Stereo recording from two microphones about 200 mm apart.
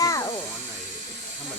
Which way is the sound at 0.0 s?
15° left (ahead or behind).